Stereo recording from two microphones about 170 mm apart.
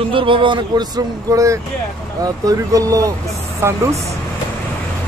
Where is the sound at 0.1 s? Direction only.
30° right (ahead or behind); by 3.8 s 15° right (ahead or behind).